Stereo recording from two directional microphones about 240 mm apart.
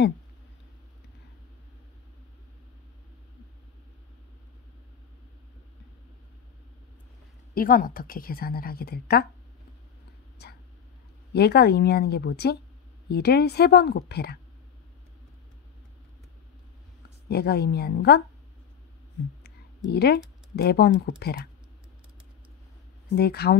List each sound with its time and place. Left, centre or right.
7.5 s a woman's voice: left
11.3 s speech: left
17.3 s a woman's voice: left
19.9 s speech: left
23.1 s a woman's voice: left